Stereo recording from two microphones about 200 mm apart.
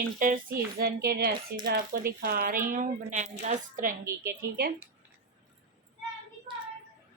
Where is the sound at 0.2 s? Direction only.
40° right (ahead or behind).